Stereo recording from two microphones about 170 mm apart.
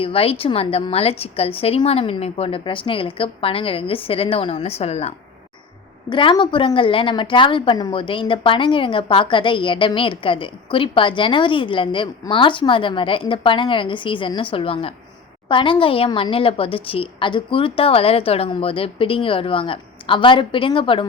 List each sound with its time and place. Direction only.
0.0 s a woman's voice: 35° left (ahead or behind)